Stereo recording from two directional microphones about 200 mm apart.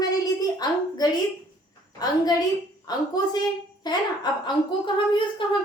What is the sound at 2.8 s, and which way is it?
A woman's voice, 20° left (ahead or behind).